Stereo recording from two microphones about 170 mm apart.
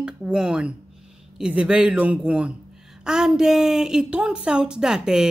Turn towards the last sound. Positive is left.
turn(degrees=-5)  # may be behind; listen again after turning